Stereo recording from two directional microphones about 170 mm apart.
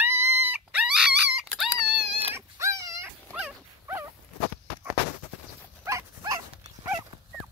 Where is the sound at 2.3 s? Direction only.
15° right (ahead or behind).